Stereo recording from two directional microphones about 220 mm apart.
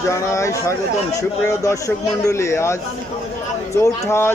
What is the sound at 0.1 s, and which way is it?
A man's voice, 15° left (ahead or behind).